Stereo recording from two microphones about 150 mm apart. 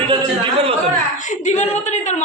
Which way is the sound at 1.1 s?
55° left (ahead or behind).